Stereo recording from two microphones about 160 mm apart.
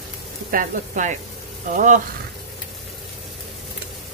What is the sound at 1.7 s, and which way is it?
Speech, 55° right (ahead or behind).